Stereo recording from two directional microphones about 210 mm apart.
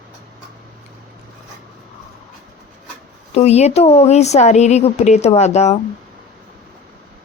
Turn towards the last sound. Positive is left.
turn(degrees=30)  # may be behind; listen again after turning